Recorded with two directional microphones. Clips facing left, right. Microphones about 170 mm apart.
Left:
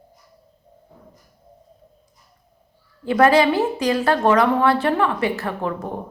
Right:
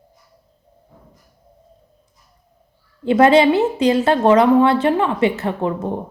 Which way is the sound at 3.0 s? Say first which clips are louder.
Right 3 dB; 25° right (ahead or behind).